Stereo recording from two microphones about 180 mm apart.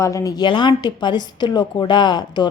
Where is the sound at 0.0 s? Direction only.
15° left (ahead or behind).